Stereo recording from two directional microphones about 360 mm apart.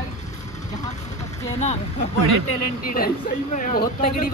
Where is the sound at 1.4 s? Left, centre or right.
Centre.